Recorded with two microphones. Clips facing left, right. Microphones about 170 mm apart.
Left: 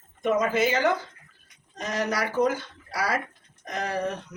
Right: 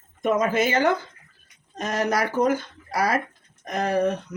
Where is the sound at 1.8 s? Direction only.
45° right (ahead or behind).